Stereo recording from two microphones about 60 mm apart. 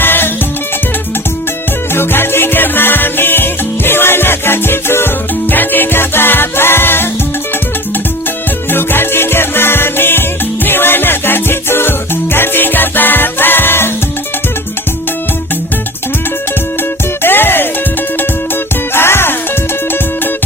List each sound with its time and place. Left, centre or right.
0.0 s music: left
1.9 s music: left
8.7 s music: left
17.2 s music: left
18.9 s music: left